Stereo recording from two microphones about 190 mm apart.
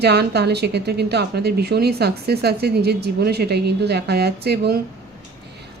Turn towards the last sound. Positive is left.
turn(degrees=-60)  # may be behind; listen again after turning